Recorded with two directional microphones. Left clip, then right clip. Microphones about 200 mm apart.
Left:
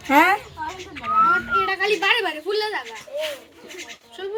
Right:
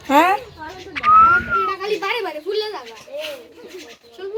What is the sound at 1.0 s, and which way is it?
Children playing, 40° right (ahead or behind).